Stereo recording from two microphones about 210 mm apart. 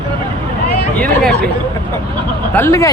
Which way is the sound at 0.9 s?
5° left (ahead or behind).